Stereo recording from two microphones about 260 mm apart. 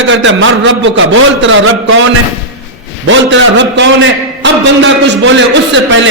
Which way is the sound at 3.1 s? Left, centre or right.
Right.